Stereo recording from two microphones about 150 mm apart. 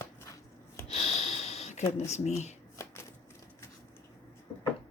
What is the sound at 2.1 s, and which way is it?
Speech, 50° left (ahead or behind).